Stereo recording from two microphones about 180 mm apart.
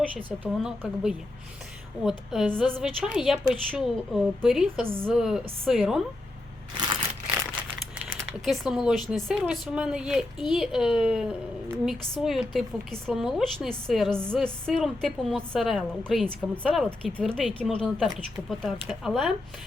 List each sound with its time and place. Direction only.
0.6 s a woman's voice: 5° right (ahead or behind)
6.7 s crushing: 25° right (ahead or behind)
8.4 s a woman's voice: centre (ahead or behind)